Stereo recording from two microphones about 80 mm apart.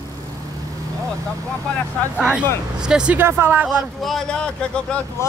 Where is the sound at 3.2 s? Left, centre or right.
Right.